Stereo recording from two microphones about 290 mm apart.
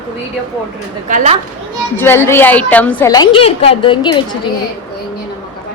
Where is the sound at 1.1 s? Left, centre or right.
Right.